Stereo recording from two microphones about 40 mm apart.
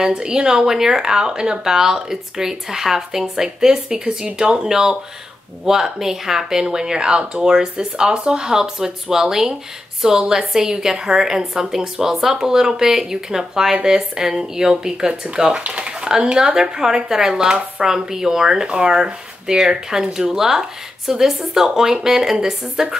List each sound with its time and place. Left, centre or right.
0.0 s speech: centre